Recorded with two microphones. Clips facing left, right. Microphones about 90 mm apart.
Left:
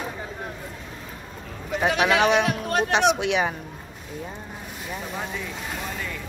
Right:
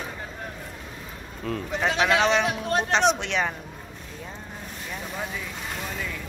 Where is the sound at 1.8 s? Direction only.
15° left (ahead or behind).